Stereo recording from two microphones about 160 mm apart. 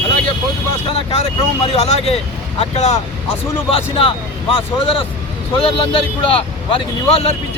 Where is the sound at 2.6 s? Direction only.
45° left (ahead or behind).